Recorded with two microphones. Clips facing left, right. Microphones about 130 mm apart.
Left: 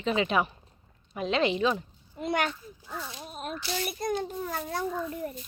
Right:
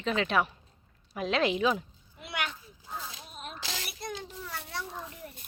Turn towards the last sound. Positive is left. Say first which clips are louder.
# left 7 dB
turn(degrees=50)  # may be behind; listen again after turning